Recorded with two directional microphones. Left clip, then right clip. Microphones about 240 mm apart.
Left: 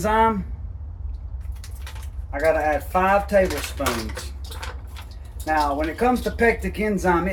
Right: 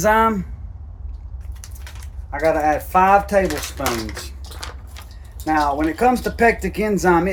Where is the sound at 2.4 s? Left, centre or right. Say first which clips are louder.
Right 2 dB; right.